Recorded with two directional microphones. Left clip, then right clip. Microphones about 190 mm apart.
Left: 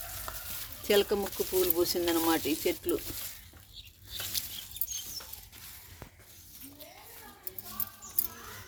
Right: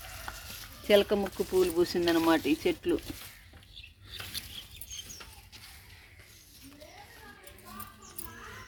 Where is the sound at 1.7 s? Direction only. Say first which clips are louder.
Right 2 dB; 45° right (ahead or behind).